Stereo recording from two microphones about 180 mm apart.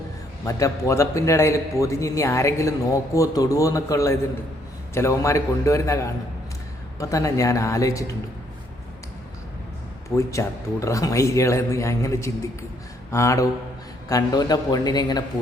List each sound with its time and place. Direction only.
0.4 s a man's voice: 15° left (ahead or behind)
10.2 s a man's voice: 15° left (ahead or behind)